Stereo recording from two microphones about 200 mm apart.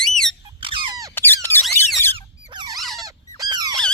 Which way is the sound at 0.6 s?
25° right (ahead or behind).